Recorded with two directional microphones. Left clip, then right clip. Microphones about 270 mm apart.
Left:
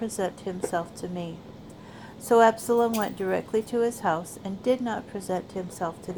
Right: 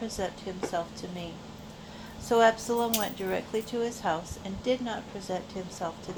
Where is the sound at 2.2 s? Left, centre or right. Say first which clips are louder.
Left 4 dB; left.